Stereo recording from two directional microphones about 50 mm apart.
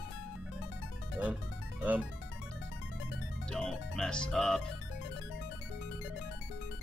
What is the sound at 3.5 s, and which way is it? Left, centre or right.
Speech, centre.